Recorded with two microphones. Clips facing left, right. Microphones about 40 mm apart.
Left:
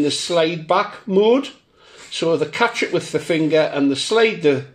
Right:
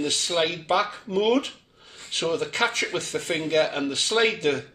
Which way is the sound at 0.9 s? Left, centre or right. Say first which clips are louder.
Left 8 dB; centre.